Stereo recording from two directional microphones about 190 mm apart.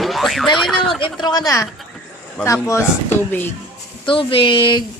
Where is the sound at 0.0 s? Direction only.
Centre (ahead or behind).